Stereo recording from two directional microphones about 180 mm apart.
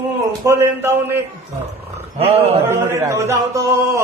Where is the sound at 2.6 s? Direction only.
15° right (ahead or behind).